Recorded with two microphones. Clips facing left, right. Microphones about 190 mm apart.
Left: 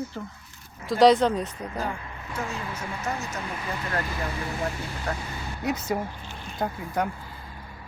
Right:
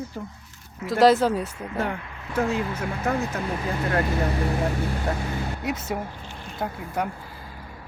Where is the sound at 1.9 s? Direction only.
65° right (ahead or behind).